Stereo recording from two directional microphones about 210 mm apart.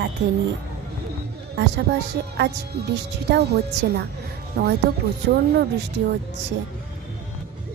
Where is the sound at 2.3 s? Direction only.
50° right (ahead or behind).